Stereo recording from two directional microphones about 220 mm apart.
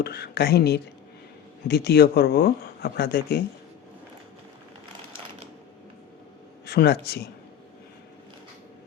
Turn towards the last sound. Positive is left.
turn(degrees=45)  # may be behind; listen again after turning